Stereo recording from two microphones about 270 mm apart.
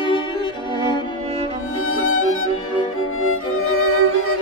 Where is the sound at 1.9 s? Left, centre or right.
Left.